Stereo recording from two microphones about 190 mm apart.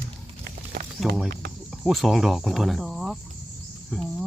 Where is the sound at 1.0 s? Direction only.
Centre (ahead or behind).